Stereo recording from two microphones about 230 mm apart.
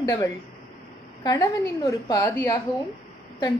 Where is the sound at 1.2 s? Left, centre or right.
Centre.